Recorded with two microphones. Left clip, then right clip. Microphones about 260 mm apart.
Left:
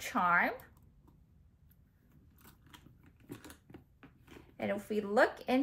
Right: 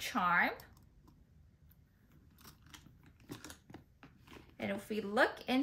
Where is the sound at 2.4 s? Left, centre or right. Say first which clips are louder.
Right 1 dB; centre.